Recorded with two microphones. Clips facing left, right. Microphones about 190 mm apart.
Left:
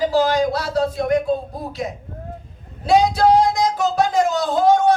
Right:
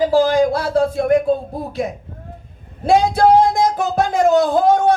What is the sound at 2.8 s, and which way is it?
Speech, 50° right (ahead or behind).